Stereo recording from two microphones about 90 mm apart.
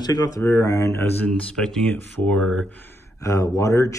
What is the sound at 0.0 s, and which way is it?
Speech, 45° left (ahead or behind).